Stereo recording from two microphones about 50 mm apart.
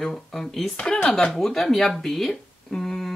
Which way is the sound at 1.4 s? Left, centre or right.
Centre.